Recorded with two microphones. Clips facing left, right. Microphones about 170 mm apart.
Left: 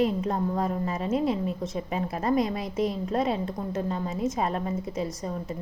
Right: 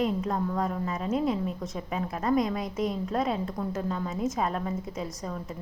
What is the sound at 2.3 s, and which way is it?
Speech, 5° left (ahead or behind).